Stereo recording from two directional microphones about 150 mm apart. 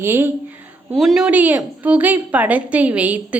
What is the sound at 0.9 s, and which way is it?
A woman's voice, centre (ahead or behind).